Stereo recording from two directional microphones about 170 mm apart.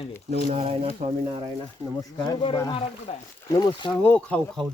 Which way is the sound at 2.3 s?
30° left (ahead or behind).